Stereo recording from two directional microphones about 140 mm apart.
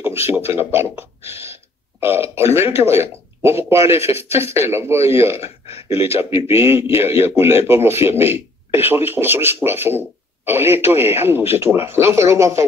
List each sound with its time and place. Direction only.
0.5 s speech: 15° right (ahead or behind)
5.4 s speech: 45° left (ahead or behind)
6.3 s speech: 20° right (ahead or behind)